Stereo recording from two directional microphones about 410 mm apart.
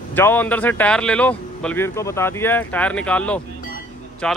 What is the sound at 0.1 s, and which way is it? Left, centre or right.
A man's voice, centre.